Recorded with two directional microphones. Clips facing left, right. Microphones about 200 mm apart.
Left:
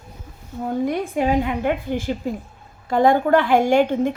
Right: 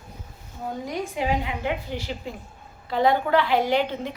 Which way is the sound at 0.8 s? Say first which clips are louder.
Left 4 dB; 55° left (ahead or behind).